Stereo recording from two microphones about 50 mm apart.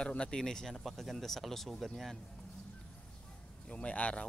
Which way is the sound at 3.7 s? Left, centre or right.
Left.